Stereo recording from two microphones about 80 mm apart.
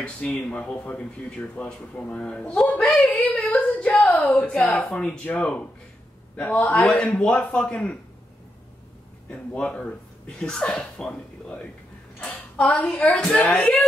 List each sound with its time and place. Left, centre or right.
0.0 s speech: centre
9.3 s speech: centre